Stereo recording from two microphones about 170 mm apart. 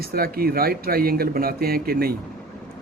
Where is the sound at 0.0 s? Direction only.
60° right (ahead or behind).